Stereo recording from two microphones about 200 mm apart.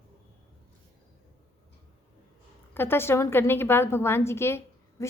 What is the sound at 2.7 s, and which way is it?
A woman's voice, 10° left (ahead or behind).